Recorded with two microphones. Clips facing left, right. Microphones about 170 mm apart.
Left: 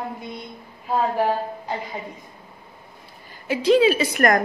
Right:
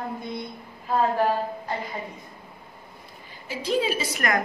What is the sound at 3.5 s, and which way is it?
Speech, 80° left.